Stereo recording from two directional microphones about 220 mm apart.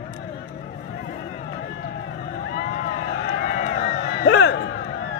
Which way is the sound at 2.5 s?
40° left (ahead or behind).